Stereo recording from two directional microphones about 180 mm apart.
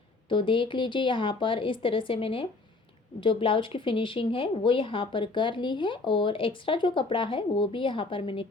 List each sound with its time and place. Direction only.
0.3 s speech: 30° left (ahead or behind)